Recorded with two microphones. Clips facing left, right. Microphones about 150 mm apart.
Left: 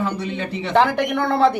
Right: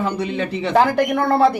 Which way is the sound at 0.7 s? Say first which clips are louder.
Right 1 dB; 5° right (ahead or behind).